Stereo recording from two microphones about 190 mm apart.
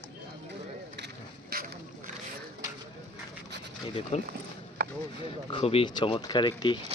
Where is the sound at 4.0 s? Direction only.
35° left (ahead or behind).